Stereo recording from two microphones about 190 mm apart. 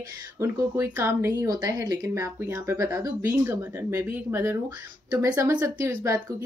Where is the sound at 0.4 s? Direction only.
15° right (ahead or behind).